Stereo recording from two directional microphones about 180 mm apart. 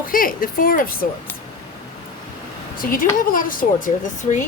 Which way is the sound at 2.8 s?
50° left (ahead or behind).